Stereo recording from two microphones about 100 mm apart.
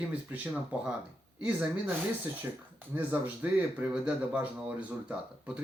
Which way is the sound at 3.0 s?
15° right (ahead or behind).